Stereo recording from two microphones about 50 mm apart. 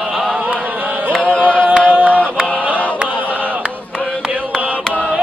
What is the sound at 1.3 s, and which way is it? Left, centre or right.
A capella, left.